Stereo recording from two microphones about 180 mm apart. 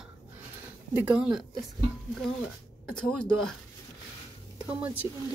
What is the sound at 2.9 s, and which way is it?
Speech, 5° left (ahead or behind).